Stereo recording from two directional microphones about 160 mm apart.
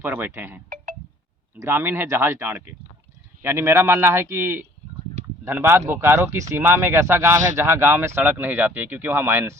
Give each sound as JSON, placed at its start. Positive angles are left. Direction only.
{"t": 0.0, "sound": "speech", "side_deg": -15}